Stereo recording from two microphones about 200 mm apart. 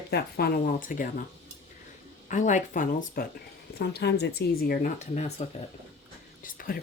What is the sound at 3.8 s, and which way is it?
Speech, 55° left (ahead or behind).